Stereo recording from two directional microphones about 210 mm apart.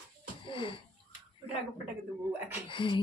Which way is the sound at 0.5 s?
25° left (ahead or behind).